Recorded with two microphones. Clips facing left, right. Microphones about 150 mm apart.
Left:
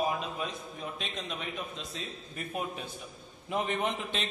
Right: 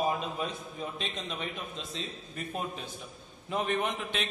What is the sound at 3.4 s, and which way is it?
Speech, 20° left (ahead or behind).